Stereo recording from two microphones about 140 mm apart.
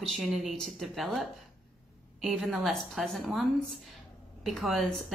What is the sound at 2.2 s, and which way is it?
Speech, centre (ahead or behind).